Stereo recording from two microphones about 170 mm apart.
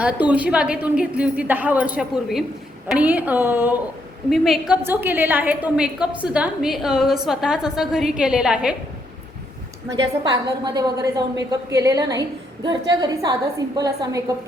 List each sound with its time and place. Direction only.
0.0 s a woman's voice: 10° right (ahead or behind)
4.3 s a woman's voice: centre (ahead or behind)
4.8 s a woman's voice: 15° right (ahead or behind)
9.9 s a woman's voice: 25° right (ahead or behind)